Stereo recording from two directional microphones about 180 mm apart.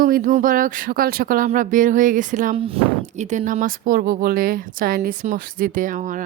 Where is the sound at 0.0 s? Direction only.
45° right (ahead or behind).